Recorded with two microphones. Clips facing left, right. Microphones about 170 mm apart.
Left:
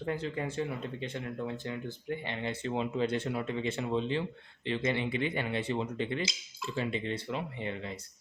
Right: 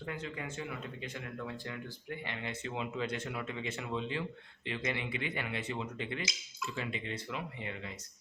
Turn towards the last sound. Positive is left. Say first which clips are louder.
# left 5 dB
turn(degrees=30)  # may be behind; listen again after turning